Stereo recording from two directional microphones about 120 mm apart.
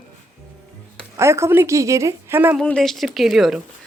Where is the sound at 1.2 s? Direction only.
25° right (ahead or behind).